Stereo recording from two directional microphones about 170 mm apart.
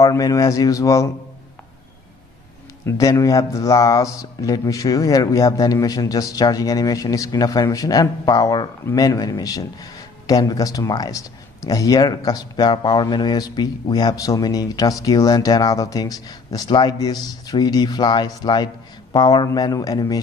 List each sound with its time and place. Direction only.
0.0 s speech: 20° left (ahead or behind)
2.8 s speech: 15° left (ahead or behind)